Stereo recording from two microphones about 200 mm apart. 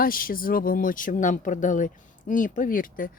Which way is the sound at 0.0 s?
45° left (ahead or behind).